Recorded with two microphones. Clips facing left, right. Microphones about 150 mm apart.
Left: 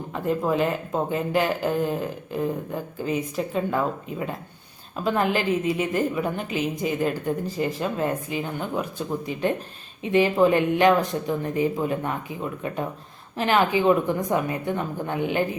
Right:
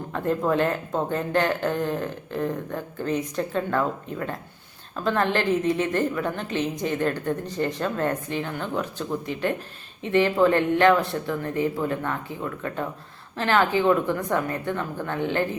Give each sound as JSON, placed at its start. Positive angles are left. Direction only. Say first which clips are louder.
{"t": 0.1, "sound": "speech", "louder": "even", "side_deg": 5}